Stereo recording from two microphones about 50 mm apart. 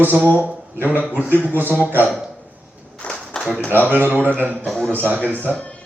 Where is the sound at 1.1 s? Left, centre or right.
Right.